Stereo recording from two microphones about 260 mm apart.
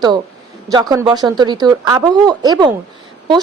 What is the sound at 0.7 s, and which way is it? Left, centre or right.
A woman's voice, centre.